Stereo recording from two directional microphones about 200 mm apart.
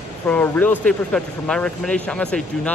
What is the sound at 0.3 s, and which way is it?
A man's voice, 10° left (ahead or behind).